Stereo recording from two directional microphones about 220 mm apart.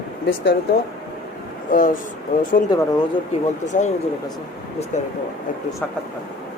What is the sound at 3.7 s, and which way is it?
Speech, 35° left (ahead or behind).